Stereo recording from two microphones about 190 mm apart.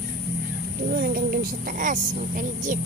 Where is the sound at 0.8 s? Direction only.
50° right (ahead or behind).